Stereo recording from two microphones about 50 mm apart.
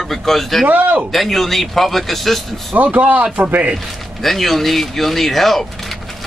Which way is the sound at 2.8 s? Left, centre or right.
Right.